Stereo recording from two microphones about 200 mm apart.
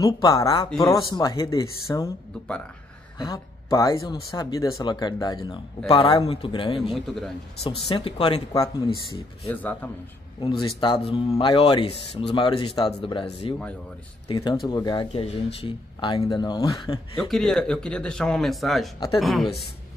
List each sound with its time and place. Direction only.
0.0 s speech: 15° left (ahead or behind)
3.2 s speech: 20° left (ahead or behind)
7.0 s speech: centre (ahead or behind)
7.6 s speech: 25° left (ahead or behind)
9.4 s speech: 10° left (ahead or behind)
10.4 s speech: 25° left (ahead or behind)
17.3 s speech: centre (ahead or behind)